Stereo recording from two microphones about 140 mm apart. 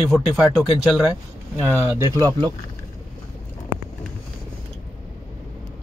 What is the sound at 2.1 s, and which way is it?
Speech, 30° right (ahead or behind).